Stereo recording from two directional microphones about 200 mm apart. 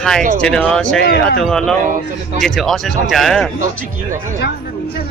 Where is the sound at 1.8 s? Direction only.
40° right (ahead or behind).